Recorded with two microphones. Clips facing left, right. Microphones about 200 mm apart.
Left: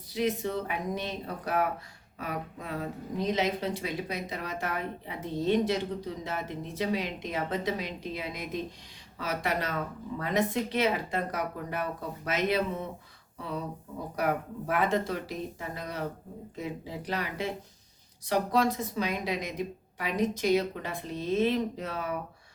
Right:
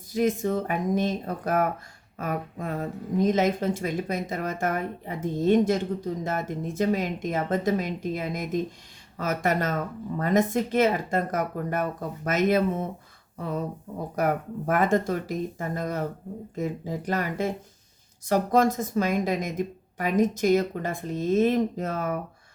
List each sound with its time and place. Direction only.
0.1 s speech: 45° right (ahead or behind)